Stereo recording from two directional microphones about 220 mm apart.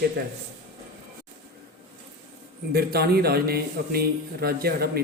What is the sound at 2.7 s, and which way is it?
A man's voice, 45° right (ahead or behind).